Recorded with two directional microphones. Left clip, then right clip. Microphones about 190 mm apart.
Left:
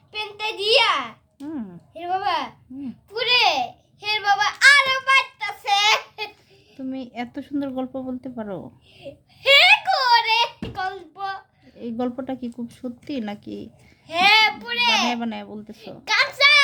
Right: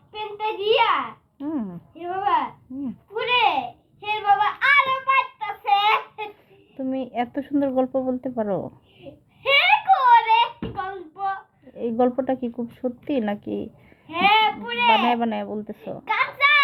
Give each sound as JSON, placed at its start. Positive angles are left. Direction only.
{"t": 0.1, "sound": "a child's voice", "side_deg": 40}
{"t": 1.4, "sound": "a sound", "side_deg": 0}
{"t": 1.9, "sound": "a woman's voice", "side_deg": 40}
{"t": 4.1, "sound": "child singing", "side_deg": 40}
{"t": 6.7, "sound": "speech", "side_deg": 0}
{"t": 9.4, "sound": "a sound", "side_deg": 40}
{"t": 11.8, "sound": "speech", "side_deg": 0}
{"t": 14.1, "sound": "child singing", "side_deg": 45}
{"t": 15.1, "sound": "speech", "side_deg": 0}
{"t": 16.1, "sound": "a sound", "side_deg": 40}